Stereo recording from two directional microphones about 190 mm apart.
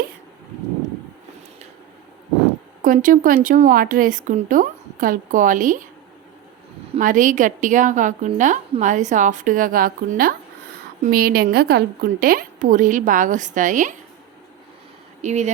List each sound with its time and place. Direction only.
2.8 s speech: 45° right (ahead or behind)
7.0 s a woman's voice: 45° right (ahead or behind)
15.2 s a woman's voice: 40° right (ahead or behind)